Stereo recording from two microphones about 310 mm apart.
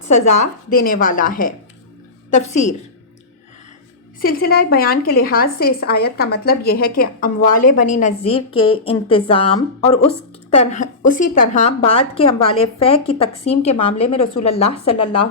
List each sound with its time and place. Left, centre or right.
0.7 s a woman's voice: left
4.2 s a woman's voice: left
14.9 s a woman's voice: left